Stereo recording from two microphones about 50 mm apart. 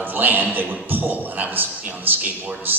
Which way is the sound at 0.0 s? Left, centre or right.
Right.